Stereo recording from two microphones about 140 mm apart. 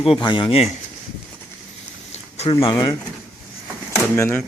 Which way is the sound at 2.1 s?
50° left (ahead or behind).